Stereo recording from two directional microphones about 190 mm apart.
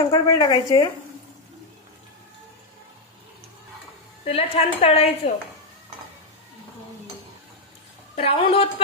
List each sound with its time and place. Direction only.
0.1 s a woman's voice: 20° left (ahead or behind)
4.3 s speech: 30° left (ahead or behind)
8.2 s a woman's voice: 30° left (ahead or behind)